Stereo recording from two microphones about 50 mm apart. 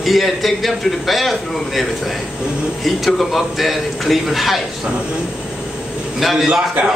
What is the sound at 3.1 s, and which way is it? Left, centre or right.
A man's voice, centre.